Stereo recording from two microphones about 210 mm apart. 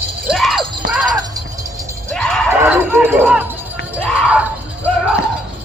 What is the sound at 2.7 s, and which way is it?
Music, 10° right (ahead or behind).